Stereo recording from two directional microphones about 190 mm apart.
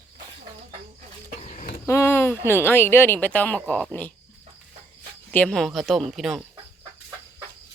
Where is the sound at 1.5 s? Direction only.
45° left (ahead or behind).